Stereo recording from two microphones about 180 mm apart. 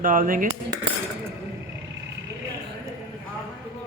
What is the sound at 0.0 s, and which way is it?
Speech, 50° right (ahead or behind).